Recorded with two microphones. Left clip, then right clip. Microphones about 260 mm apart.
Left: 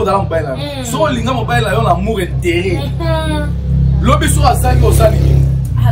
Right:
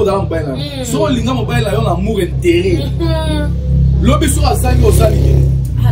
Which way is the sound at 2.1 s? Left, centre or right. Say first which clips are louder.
Right 3 dB; centre.